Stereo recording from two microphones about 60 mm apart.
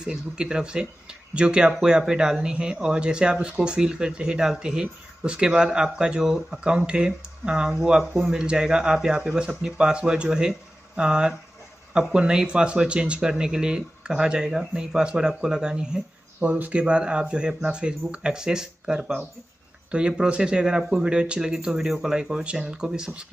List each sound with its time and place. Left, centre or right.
0.0 s speech: centre
16.4 s speech: right